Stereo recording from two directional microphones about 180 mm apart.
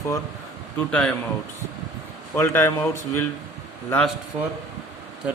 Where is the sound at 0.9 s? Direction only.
5° left (ahead or behind).